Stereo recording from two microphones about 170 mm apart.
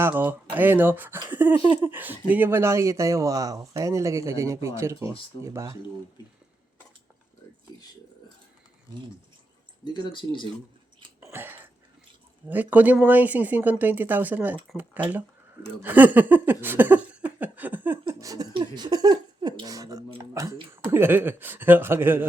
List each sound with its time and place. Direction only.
0.0 s speech: 10° right (ahead or behind)
1.5 s speech: 25° right (ahead or behind)
1.9 s speech: 10° right (ahead or behind)
9.8 s speech: 30° left (ahead or behind)
11.3 s wheeze: 10° right (ahead or behind)
12.5 s speech: 10° right (ahead or behind)
15.8 s a sound: 10° right (ahead or behind)
18.1 s speech: 20° right (ahead or behind)